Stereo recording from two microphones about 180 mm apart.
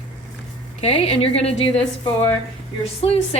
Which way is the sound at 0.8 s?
35° left (ahead or behind).